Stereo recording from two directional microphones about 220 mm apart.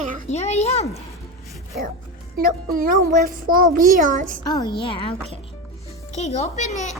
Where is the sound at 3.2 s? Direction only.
40° right (ahead or behind).